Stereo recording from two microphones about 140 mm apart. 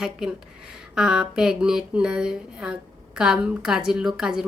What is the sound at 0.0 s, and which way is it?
Speech, 5° right (ahead or behind).